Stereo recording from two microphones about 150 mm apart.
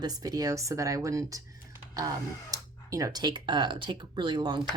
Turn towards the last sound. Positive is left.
turn(degrees=-30)  # may be behind; listen again after turning